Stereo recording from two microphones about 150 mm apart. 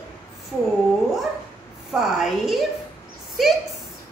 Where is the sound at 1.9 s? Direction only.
5° right (ahead or behind).